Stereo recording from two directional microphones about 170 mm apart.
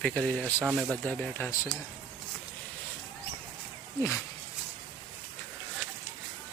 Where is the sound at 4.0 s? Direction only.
15° left (ahead or behind).